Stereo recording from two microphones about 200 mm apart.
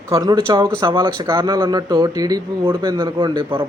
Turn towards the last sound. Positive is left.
turn(degrees=-20)  # may be behind; listen again after turning